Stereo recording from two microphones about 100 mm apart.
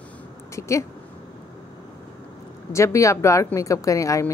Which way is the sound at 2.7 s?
30° left (ahead or behind).